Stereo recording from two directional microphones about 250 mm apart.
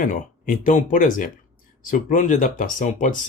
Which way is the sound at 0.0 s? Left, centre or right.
Left.